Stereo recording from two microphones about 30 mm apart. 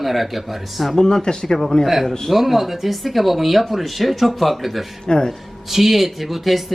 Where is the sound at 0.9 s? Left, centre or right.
Left.